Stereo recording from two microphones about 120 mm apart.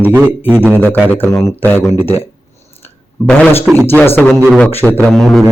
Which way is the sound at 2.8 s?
10° left (ahead or behind).